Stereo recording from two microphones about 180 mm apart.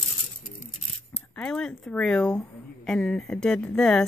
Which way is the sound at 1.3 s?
5° left (ahead or behind).